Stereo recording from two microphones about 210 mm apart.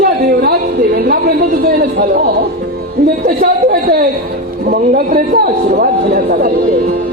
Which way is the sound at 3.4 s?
45° right (ahead or behind).